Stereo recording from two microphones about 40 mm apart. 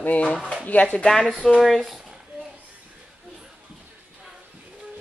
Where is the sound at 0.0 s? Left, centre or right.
Left.